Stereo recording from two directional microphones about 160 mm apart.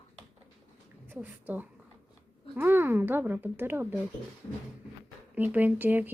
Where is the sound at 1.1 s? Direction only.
10° right (ahead or behind).